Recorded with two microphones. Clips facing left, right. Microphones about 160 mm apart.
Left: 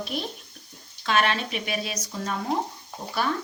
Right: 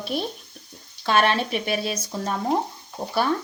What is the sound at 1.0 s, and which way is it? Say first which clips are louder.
A woman's voice: right 4 dB; 35° right (ahead or behind).